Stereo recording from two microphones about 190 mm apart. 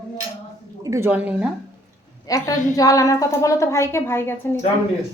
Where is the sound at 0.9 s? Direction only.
15° right (ahead or behind).